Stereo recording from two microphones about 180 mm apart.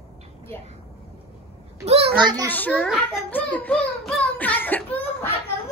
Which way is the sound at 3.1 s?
10° left (ahead or behind).